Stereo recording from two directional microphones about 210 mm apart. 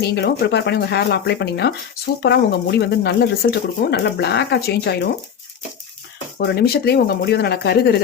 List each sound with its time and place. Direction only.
0.0 s speech: 50° left (ahead or behind)
6.4 s speech: 50° left (ahead or behind)